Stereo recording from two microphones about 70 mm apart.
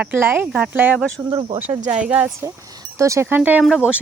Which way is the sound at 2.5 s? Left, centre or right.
Right.